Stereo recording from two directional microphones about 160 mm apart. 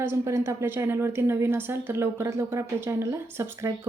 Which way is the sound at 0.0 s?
15° right (ahead or behind).